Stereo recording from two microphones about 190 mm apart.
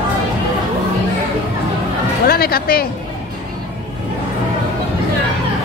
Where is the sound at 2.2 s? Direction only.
55° left (ahead or behind).